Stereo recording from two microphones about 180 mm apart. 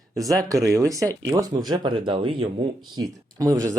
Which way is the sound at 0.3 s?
20° right (ahead or behind).